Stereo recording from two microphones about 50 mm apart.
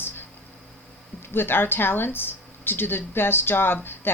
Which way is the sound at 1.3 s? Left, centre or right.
Left.